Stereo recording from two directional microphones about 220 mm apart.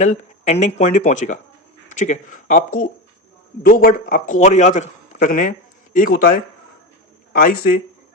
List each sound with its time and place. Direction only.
0.0 s speech: 30° left (ahead or behind)